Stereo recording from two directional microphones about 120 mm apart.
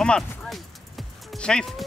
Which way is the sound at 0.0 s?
5° left (ahead or behind).